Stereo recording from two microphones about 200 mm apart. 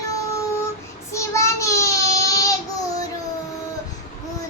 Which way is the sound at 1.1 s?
15° left (ahead or behind).